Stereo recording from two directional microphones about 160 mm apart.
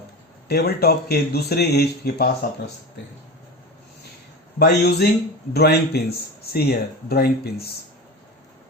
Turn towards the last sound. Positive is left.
turn(degrees=80)